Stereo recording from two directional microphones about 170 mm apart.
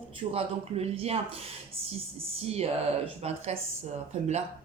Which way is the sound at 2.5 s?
40° right (ahead or behind).